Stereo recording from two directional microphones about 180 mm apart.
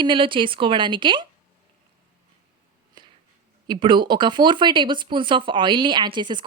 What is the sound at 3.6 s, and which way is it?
Speech, 25° right (ahead or behind).